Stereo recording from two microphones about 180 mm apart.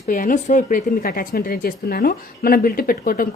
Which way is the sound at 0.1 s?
50° left (ahead or behind).